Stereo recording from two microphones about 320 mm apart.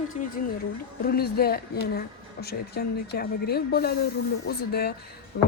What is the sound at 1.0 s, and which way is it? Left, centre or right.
Speech, left.